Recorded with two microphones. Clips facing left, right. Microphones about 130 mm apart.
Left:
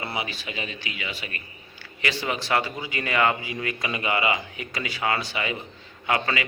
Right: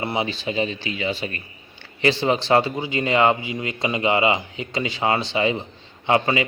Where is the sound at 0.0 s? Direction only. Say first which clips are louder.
Right 7 dB; 25° right (ahead or behind).